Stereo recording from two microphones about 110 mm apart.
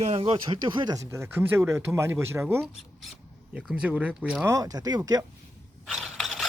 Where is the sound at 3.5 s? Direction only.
5° right (ahead or behind).